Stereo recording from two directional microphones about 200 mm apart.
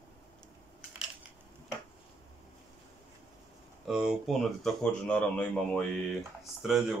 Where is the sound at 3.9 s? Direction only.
5° right (ahead or behind).